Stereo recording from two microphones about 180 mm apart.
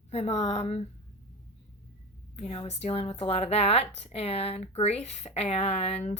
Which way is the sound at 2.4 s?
35° left (ahead or behind).